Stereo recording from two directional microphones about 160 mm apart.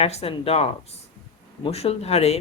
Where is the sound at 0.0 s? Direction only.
40° left (ahead or behind).